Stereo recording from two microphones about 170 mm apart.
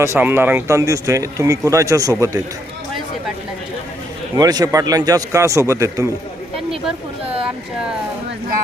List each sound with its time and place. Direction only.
0.0 s speech: 15° right (ahead or behind)
4.4 s a man's voice: 20° right (ahead or behind)